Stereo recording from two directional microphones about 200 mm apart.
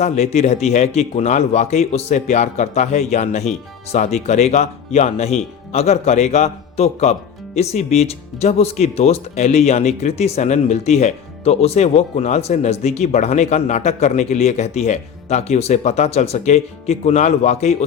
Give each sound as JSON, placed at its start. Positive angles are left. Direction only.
{"t": 0.0, "sound": "speech", "side_deg": 35}